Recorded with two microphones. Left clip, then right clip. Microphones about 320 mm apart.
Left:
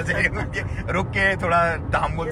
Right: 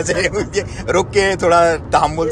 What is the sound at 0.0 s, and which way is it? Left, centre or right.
Speech, centre.